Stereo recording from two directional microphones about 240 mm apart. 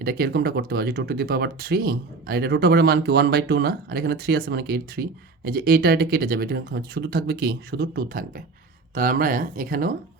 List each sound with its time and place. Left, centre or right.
0.0 s speech: right